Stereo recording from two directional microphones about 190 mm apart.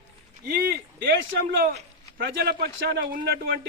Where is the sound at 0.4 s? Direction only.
50° right (ahead or behind).